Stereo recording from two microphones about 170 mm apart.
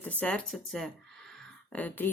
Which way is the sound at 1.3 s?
10° left (ahead or behind).